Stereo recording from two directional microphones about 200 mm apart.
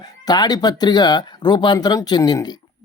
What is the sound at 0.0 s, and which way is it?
A man's voice, 20° left (ahead or behind).